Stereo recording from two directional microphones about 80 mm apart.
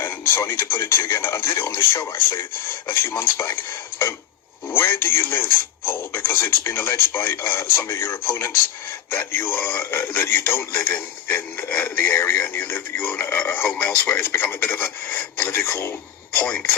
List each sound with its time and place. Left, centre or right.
0.0 s speech: left
16.4 s speech: centre